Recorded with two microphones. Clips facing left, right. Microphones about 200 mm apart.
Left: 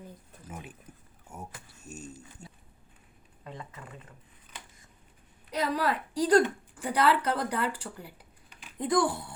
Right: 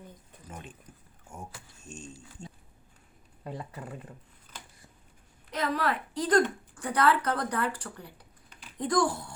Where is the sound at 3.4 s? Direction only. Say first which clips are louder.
Right 5 dB; 35° right (ahead or behind).